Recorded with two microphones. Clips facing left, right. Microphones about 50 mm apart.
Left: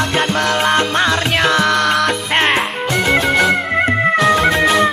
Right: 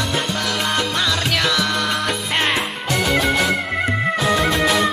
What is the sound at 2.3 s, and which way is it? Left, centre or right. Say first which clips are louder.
Music: left 5 dB; left.